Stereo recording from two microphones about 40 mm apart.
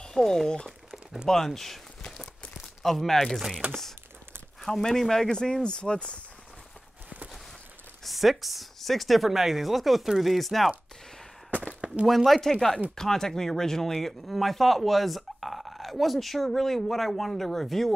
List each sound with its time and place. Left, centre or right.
0.0 s speech: centre
2.8 s speech: centre
3.6 s speech: right
4.6 s speech: centre; by 6.1 s left
8.0 s speech: centre
12.1 s speech: centre